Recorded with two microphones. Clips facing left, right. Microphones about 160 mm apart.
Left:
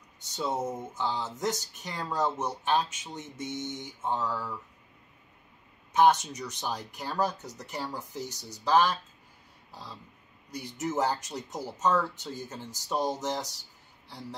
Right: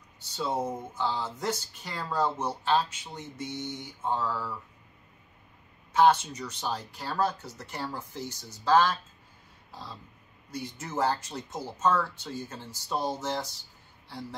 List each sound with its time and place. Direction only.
0.9 s speech: 15° left (ahead or behind)
3.7 s mantra: 20° left (ahead or behind)
5.9 s speech: 15° left (ahead or behind)
9.7 s a sound: 15° left (ahead or behind)
10.5 s speech: 15° left (ahead or behind)